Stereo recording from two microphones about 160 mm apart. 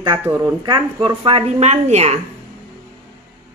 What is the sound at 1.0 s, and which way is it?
Speech, 35° right (ahead or behind).